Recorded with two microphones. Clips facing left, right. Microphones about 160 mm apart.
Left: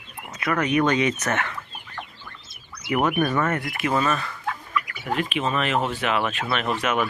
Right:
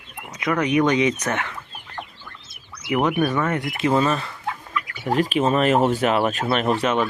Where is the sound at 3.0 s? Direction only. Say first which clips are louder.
Right 1 dB; 15° right (ahead or behind).